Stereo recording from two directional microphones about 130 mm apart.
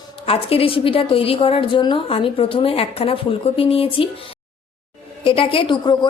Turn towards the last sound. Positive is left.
turn(degrees=40)  # may be behind; listen again after turning